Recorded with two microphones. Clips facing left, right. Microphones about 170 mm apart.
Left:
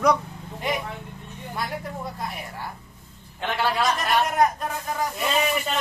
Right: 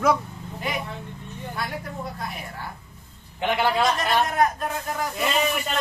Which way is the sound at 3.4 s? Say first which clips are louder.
Right 3 dB; 15° right (ahead or behind).